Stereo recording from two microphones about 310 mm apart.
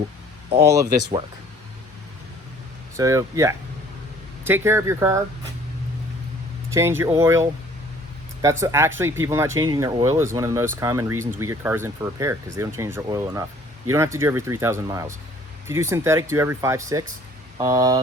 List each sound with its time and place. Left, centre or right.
0.5 s speech: centre
2.9 s speech: centre
6.7 s speech: centre
8.6 s speech: centre